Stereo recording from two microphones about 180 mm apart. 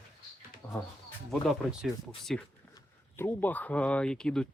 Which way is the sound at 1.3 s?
Centre (ahead or behind).